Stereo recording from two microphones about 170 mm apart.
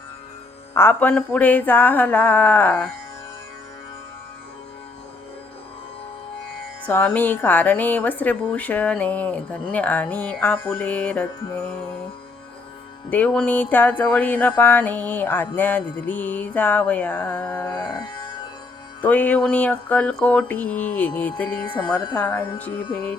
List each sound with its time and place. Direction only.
0.7 s a woman's voice: 15° left (ahead or behind)
6.8 s a woman's voice: 10° left (ahead or behind)
13.1 s a woman's voice: 10° left (ahead or behind)
17.7 s music: 25° left (ahead or behind)
19.0 s a woman's voice: 10° left (ahead or behind)
21.6 s speech: 25° left (ahead or behind)
22.1 s a woman's voice: 10° left (ahead or behind)